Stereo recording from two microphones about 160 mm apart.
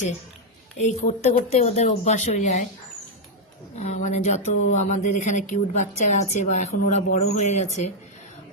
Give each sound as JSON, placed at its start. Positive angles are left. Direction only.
{"t": 0.8, "sound": "speech", "side_deg": 50}
{"t": 3.8, "sound": "speech", "side_deg": 45}